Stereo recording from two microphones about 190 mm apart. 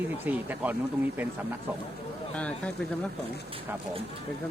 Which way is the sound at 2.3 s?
5° left (ahead or behind).